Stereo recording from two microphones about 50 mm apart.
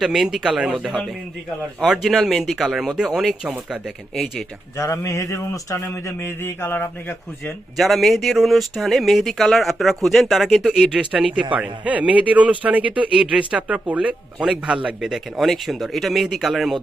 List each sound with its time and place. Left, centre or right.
0.0 s speech: centre
3.4 s speech: right
4.1 s speech: centre
4.8 s a sound: left
5.8 s a man's voice: left
7.8 s speech: centre
11.5 s speech: right
15.0 s speech: centre